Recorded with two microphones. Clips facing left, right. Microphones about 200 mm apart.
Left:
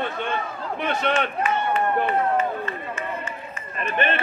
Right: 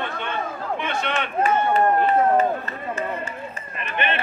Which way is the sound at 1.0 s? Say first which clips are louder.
Left 6 dB; 40° left (ahead or behind).